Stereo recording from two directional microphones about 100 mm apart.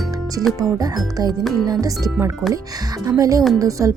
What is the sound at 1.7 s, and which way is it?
Speech, 35° right (ahead or behind).